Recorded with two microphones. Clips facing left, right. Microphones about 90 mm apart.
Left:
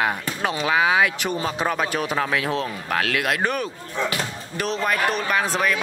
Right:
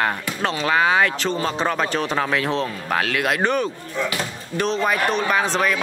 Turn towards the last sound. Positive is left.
turn(degrees=5)  # may be behind; listen again after turning